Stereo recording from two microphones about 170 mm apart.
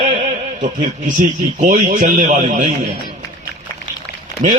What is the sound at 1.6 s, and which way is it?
Speech, 50° right (ahead or behind).